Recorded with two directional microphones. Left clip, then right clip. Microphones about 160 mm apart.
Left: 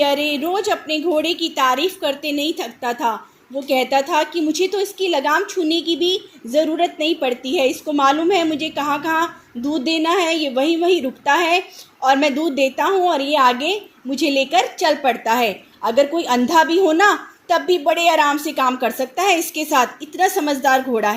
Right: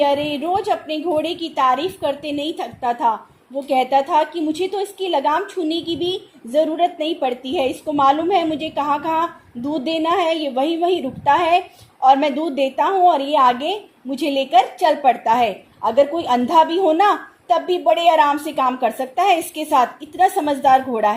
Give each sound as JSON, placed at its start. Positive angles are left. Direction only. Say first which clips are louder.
{"t": 0.0, "sound": "a woman's voice", "louder": "even", "side_deg": 40}